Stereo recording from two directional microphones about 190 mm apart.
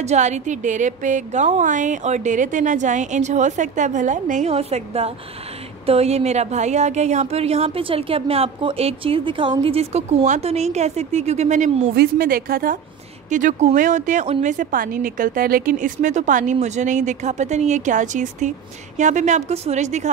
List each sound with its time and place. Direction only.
0.0 s a woman's voice: 35° right (ahead or behind)
11.9 s a woman's voice: 50° right (ahead or behind)